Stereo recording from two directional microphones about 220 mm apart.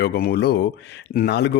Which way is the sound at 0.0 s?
45° left (ahead or behind).